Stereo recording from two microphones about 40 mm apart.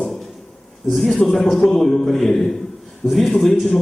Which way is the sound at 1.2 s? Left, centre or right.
Centre.